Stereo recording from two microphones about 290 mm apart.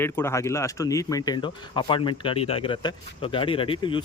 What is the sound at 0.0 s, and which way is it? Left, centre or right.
Speech, centre.